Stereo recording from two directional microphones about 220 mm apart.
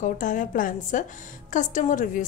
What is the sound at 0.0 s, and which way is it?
A woman's voice, 35° left (ahead or behind).